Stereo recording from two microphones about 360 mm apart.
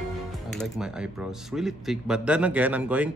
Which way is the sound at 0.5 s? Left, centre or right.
Centre.